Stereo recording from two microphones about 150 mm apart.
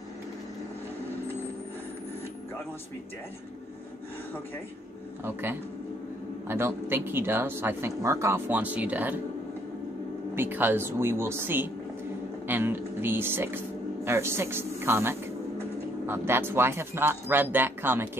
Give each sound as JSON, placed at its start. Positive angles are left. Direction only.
{"t": 5.2, "sound": "speech", "side_deg": -15}
{"t": 10.3, "sound": "speech", "side_deg": -15}